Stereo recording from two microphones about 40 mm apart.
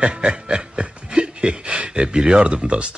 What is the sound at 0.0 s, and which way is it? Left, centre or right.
Snicker, right.